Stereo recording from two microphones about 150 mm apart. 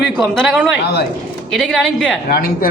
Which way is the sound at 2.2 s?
75° left (ahead or behind).